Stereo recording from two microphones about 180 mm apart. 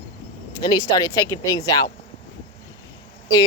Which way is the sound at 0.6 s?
20° left (ahead or behind).